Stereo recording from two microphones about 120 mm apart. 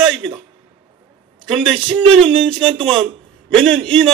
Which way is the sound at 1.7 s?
5° left (ahead or behind).